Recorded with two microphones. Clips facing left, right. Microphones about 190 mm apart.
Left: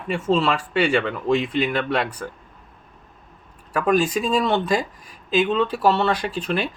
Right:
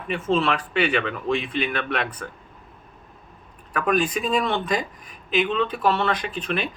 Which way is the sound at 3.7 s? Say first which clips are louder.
Left 3 dB; 25° left (ahead or behind).